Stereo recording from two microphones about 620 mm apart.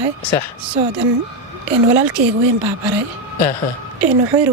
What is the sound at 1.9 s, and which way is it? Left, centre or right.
Speech, right.